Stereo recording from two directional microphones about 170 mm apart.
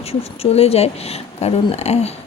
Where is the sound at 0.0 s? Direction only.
35° left (ahead or behind).